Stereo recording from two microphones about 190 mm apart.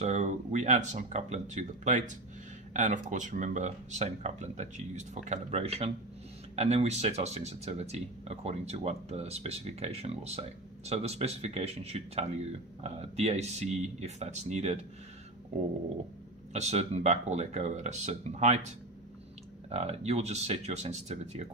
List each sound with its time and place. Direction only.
0.0 s speech: 40° right (ahead or behind)
16.5 s speech: 35° right (ahead or behind)
19.7 s speech: 35° right (ahead or behind)